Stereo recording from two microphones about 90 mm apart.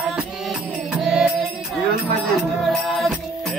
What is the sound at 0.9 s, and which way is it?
Music, 5° right (ahead or behind).